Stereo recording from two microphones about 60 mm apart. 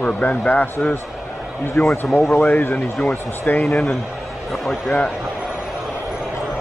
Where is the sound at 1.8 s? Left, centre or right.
Left.